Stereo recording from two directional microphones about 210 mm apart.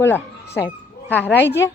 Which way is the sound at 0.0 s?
10° left (ahead or behind).